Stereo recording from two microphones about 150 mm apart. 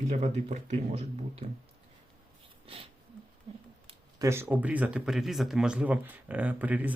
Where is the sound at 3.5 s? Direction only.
35° right (ahead or behind).